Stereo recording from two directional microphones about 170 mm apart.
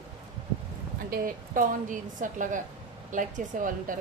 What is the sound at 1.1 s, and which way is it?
A woman's voice, 55° right (ahead or behind).